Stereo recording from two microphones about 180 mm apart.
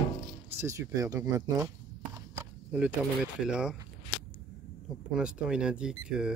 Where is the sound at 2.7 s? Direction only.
5° right (ahead or behind).